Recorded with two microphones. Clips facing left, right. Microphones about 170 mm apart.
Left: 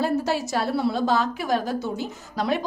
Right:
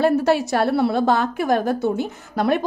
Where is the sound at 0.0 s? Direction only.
60° right (ahead or behind).